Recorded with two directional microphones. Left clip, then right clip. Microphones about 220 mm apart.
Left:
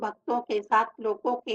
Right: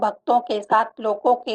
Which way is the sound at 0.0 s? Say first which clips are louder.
Right 10 dB; 40° right (ahead or behind).